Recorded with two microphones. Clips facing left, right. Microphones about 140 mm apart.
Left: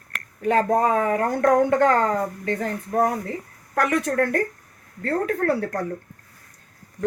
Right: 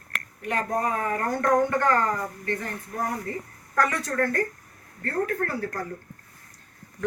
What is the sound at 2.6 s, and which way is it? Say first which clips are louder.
A woman's voice: left 9 dB; 70° left (ahead or behind).